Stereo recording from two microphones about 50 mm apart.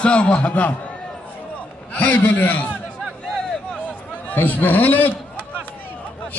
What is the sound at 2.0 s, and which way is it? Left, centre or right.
Speech, left.